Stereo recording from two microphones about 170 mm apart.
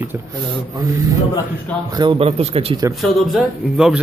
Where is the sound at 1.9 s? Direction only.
25° right (ahead or behind).